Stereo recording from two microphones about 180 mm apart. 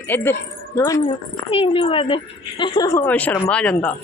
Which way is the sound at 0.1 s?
10° left (ahead or behind).